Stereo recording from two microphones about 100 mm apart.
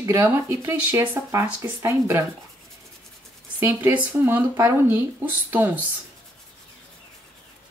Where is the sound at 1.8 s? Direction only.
30° right (ahead or behind).